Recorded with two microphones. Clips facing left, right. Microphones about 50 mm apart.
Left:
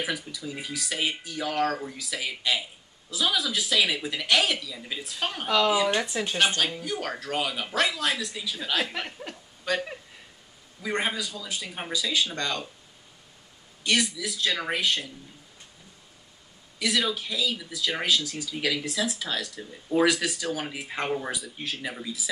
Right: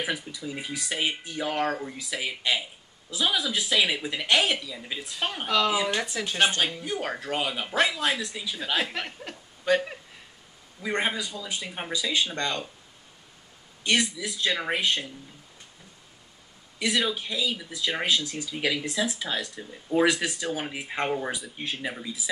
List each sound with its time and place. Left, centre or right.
0.0 s speech: centre
6.3 s speech: centre
8.9 s speech: centre
9.3 s speech: centre
11.0 s speech: centre
13.8 s speech: right
16.7 s speech: centre
20.1 s speech: right